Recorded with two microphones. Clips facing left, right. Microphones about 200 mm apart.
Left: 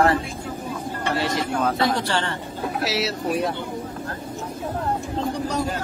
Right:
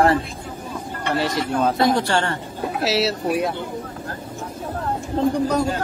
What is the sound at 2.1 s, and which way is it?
Speech, 50° right (ahead or behind).